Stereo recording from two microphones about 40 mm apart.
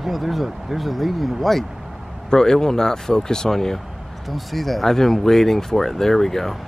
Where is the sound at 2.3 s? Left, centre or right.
Centre.